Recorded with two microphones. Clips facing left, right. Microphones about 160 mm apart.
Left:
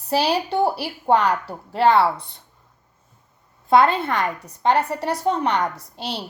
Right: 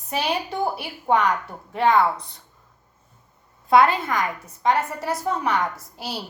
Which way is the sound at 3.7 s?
25° left (ahead or behind).